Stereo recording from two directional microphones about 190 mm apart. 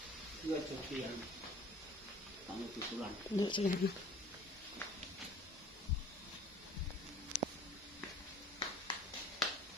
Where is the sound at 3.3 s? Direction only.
25° left (ahead or behind).